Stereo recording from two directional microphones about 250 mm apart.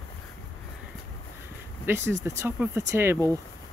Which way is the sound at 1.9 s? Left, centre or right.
Centre.